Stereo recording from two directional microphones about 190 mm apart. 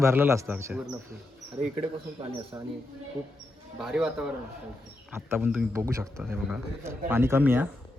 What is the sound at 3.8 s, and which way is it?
A man's voice, 5° right (ahead or behind).